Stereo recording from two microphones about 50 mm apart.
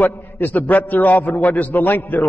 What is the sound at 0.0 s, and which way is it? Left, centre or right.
A man's voice, left.